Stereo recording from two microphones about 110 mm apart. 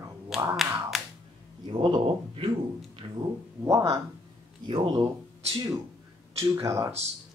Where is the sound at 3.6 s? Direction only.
30° right (ahead or behind).